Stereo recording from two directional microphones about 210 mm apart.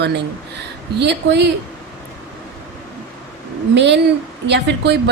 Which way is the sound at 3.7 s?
55° right (ahead or behind).